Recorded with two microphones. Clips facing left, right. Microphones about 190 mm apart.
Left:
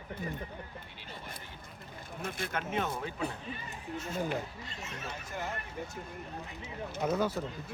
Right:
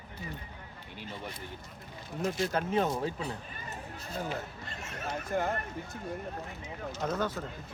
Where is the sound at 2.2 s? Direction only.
55° left (ahead or behind).